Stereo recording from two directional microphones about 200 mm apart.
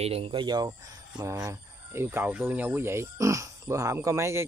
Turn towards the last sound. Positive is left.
turn(degrees=-15)  # may be behind; listen again after turning